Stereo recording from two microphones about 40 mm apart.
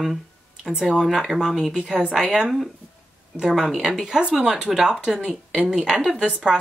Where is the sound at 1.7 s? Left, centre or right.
Right.